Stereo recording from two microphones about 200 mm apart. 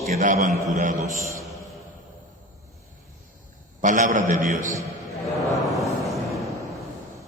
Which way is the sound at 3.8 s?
40° right (ahead or behind).